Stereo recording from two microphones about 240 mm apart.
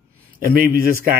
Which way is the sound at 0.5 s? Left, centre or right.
Right.